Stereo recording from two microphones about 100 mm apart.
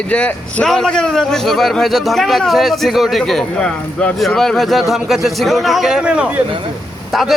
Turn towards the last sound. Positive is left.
turn(degrees=-10)  # may be behind; listen again after turning